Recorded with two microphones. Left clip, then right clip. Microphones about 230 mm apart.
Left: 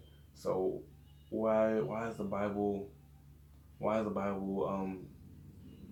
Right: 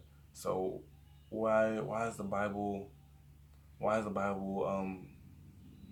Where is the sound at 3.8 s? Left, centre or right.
Right.